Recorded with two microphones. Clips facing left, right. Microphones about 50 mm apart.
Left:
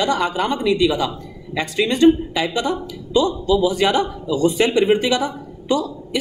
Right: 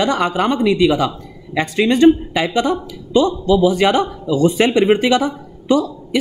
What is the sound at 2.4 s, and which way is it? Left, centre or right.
Speech, right.